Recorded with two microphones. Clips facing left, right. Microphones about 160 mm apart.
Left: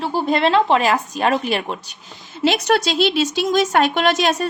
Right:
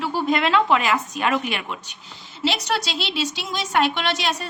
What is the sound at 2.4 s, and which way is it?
A woman's voice, 50° left (ahead or behind).